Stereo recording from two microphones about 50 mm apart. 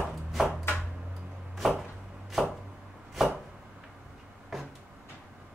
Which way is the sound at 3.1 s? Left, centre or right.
Centre.